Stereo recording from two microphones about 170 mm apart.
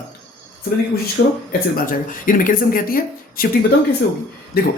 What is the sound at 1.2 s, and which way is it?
Speech, 90° left.